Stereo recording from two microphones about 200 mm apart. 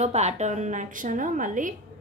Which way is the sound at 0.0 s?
35° right (ahead or behind).